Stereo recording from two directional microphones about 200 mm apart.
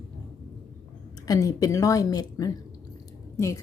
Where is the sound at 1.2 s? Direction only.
15° left (ahead or behind).